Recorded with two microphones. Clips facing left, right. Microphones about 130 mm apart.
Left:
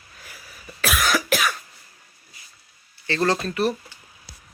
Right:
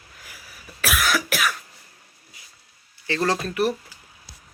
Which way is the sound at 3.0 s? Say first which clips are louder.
Left 1 dB; 10° right (ahead or behind).